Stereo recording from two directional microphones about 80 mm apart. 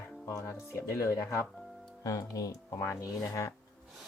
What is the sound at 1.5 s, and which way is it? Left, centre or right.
Music, centre.